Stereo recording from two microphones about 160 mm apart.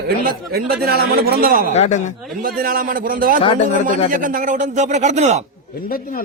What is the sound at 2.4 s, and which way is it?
A man's voice, 65° right (ahead or behind).